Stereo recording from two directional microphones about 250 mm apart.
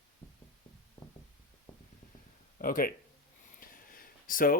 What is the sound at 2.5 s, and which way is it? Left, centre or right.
Speech, left.